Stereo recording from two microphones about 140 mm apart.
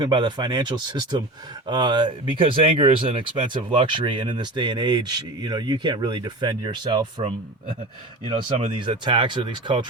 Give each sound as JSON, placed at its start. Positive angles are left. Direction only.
{"t": 0.0, "sound": "speech", "side_deg": -35}
{"t": 8.2, "sound": "speech", "side_deg": -45}